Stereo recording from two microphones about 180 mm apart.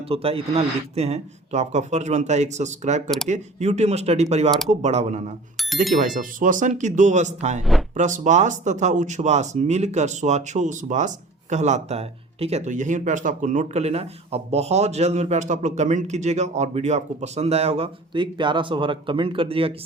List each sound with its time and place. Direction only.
0.1 s speech: 30° right (ahead or behind)
5.5 s bicycle bell: centre (ahead or behind)
6.0 s speech: 45° right (ahead or behind)
7.6 s speech: centre (ahead or behind)
7.9 s speech: 40° right (ahead or behind)